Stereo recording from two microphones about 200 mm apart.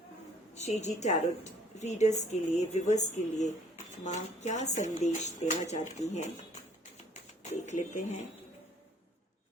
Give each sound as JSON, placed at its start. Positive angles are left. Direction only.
{"t": 0.5, "sound": "speech", "side_deg": 35}
{"t": 7.6, "sound": "speech", "side_deg": 35}